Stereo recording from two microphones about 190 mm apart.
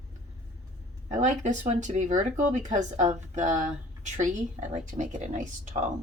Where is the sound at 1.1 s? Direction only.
40° right (ahead or behind).